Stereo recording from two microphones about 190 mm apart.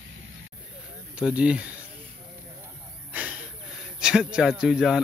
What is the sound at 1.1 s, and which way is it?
Speech, 5° right (ahead or behind).